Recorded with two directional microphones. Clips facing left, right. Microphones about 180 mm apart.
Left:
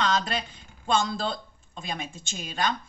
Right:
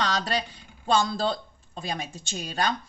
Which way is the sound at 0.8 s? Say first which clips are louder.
Right 2 dB; 35° right (ahead or behind).